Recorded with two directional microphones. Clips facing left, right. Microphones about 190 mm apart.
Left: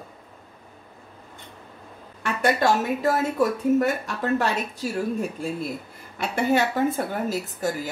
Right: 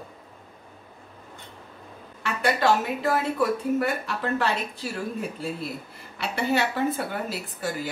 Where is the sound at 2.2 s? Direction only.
45° left (ahead or behind).